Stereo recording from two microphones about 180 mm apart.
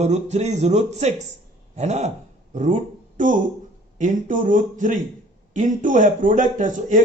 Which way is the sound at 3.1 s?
45° right (ahead or behind).